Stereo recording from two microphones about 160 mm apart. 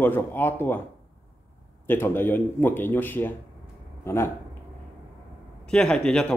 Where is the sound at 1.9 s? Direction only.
15° left (ahead or behind).